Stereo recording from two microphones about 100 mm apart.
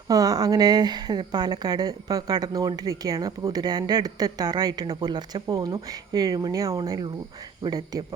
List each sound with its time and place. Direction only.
0.1 s speech: 35° right (ahead or behind)